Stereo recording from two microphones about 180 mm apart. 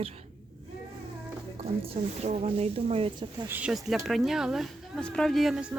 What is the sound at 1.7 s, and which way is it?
Speech, 35° right (ahead or behind).